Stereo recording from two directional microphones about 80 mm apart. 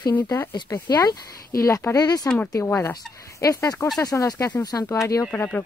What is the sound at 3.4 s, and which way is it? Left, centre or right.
Speech, left.